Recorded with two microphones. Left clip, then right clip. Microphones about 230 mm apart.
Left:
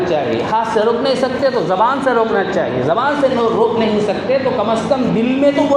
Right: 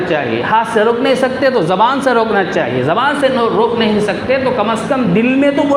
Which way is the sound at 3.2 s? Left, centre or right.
Right.